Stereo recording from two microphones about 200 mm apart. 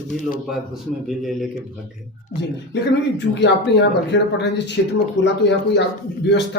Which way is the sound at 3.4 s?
60° left (ahead or behind).